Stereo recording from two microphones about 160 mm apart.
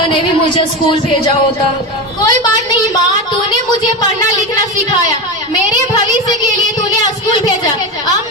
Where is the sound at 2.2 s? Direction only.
25° left (ahead or behind).